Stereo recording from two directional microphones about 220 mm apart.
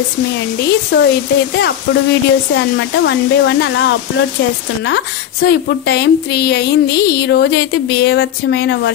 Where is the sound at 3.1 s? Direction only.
55° left (ahead or behind).